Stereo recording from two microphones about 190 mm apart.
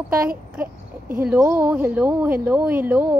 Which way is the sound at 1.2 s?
10° right (ahead or behind).